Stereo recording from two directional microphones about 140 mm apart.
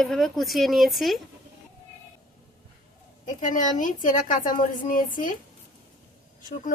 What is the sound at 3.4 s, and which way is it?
A woman's voice, 65° left (ahead or behind).